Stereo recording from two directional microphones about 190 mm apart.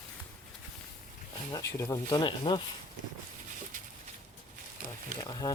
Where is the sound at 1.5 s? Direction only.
20° left (ahead or behind).